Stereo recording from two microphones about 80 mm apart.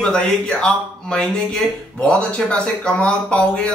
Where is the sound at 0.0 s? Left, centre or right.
Centre.